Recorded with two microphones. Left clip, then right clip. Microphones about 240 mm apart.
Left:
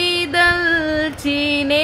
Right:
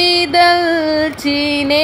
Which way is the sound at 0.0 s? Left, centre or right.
Centre.